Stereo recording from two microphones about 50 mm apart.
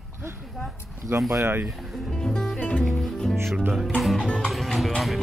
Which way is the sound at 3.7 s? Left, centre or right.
Centre.